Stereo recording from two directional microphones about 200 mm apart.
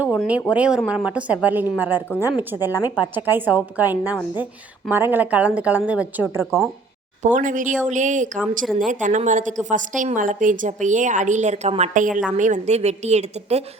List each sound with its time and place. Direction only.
0.0 s a woman's voice: 5° right (ahead or behind)
2.6 s a woman's voice: 20° left (ahead or behind)
3.2 s a woman's voice: 10° right (ahead or behind)
7.2 s a woman's voice: 40° right (ahead or behind)